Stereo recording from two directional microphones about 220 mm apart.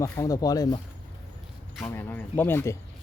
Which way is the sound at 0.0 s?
15° left (ahead or behind).